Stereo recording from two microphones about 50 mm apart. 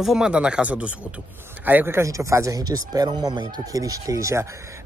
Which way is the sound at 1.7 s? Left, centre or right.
Right.